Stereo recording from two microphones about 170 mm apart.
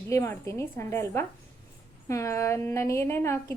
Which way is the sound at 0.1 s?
15° left (ahead or behind).